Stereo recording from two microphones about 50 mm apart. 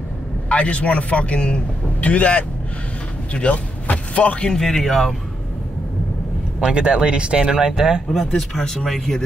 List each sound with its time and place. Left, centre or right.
0.5 s speech: left
4.5 s speech: centre
6.6 s speech: centre
8.4 s speech: centre